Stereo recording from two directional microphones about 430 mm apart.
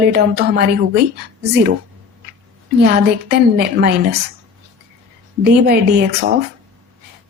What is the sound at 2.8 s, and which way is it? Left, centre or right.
Speech, right.